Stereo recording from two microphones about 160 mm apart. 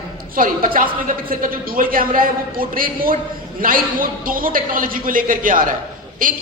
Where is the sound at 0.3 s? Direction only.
60° right (ahead or behind).